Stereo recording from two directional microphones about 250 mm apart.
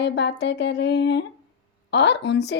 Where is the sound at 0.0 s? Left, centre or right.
Left.